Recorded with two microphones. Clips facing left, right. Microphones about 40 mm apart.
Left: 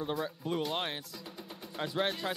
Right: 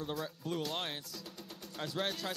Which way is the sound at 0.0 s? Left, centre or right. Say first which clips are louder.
Left 4 dB; centre.